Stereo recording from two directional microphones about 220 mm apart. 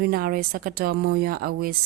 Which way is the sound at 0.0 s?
40° right (ahead or behind).